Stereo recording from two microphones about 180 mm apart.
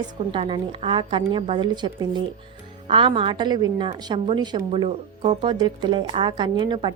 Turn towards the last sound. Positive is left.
turn(degrees=-25)  # may be behind; listen again after turning